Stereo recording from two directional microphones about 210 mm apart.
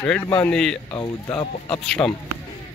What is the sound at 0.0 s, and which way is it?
Speech, 5° left (ahead or behind).